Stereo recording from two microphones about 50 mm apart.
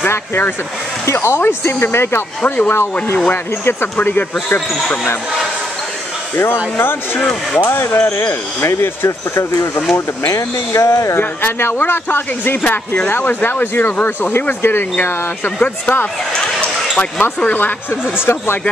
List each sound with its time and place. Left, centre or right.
0.1 s speech: left
2.4 s speech: left
2.7 s speech: left
4.0 s speech: left
6.8 s speech: left
7.8 s speech: left
8.8 s speech: left
9.9 s speech: left
11.1 s speech: left
12.6 s speech: left
16.9 s speech: left
17.5 s speech: left
18.1 s speech: left